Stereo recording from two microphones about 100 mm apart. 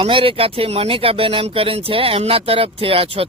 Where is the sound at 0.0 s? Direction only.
65° right (ahead or behind).